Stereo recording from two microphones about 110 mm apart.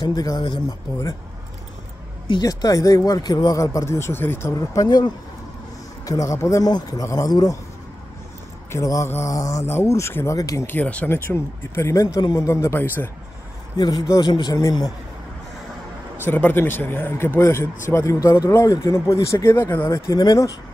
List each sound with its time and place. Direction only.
0.0 s speech: 35° left (ahead or behind)
2.4 s speech: 35° left (ahead or behind)
4.6 s speech: 35° left (ahead or behind)
8.7 s speech: 30° left (ahead or behind)
10.7 s speech: 15° left (ahead or behind)
13.7 s speech: 40° left (ahead or behind)
16.2 s speech: 20° left (ahead or behind); by 20.5 s 35° left (ahead or behind)